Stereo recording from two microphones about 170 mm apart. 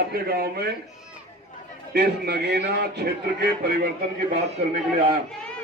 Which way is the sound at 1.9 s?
70° right (ahead or behind).